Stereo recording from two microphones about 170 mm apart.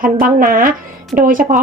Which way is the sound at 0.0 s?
55° right (ahead or behind).